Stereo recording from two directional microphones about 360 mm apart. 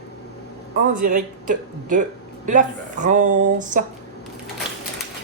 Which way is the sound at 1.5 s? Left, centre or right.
Right.